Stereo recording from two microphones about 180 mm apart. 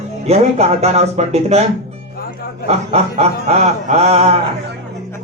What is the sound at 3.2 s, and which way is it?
A man's voice, 35° right (ahead or behind).